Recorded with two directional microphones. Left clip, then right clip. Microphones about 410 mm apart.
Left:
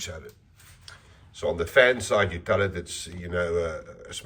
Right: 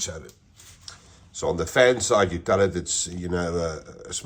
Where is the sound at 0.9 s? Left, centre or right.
Centre.